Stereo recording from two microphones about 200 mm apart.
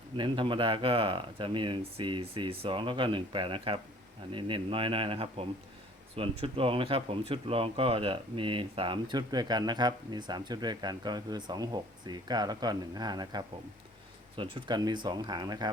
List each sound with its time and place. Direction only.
0.2 s speech: 25° right (ahead or behind)